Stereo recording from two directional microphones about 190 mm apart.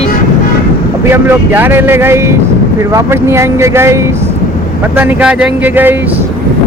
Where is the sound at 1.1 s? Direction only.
10° right (ahead or behind).